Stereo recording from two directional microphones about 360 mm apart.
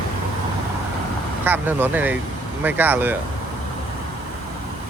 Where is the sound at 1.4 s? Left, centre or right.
Centre.